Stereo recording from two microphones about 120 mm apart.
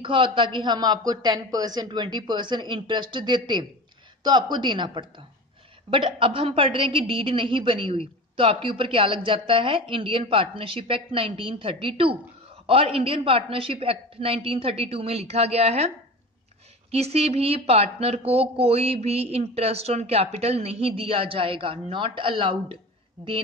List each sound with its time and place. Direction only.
0.0 s a woman's voice: 45° right (ahead or behind); by 15.9 s 60° right (ahead or behind)
16.9 s speech: 55° right (ahead or behind)